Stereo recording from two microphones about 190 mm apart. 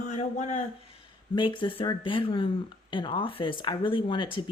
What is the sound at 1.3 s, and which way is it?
Speech, 25° left (ahead or behind).